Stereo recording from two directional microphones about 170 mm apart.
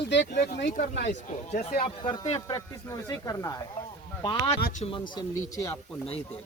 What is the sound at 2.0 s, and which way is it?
Speech, 20° left (ahead or behind).